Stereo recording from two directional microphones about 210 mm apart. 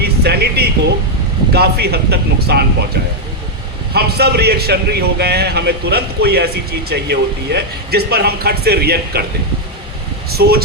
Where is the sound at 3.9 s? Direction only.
50° right (ahead or behind).